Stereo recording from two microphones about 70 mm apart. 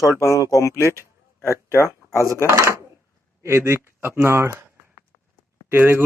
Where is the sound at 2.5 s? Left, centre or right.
Right.